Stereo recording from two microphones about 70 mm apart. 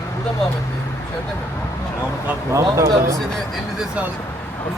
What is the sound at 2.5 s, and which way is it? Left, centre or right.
Speech, right.